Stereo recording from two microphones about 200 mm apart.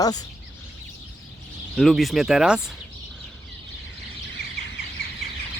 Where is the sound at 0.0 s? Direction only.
20° left (ahead or behind).